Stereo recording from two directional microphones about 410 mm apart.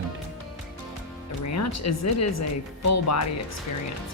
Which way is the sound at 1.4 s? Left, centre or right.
Left.